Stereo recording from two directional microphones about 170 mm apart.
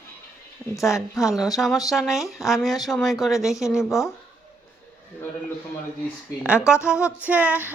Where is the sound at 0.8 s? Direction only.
Centre (ahead or behind).